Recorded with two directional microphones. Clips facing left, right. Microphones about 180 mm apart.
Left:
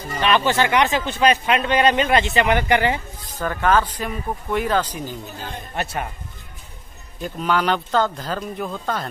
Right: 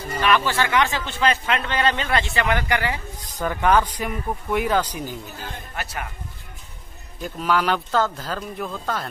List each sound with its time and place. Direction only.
0.2 s speech: 20° left (ahead or behind)
3.3 s speech: 15° right (ahead or behind)
5.8 s speech: 25° left (ahead or behind)
7.2 s speech: 5° right (ahead or behind)
8.4 s speech: 10° left (ahead or behind)